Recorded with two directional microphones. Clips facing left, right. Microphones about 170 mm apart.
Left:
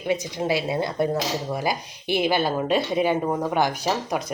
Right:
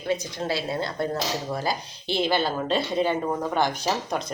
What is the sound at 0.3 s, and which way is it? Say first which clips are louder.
Speech: left 4 dB; 15° left (ahead or behind).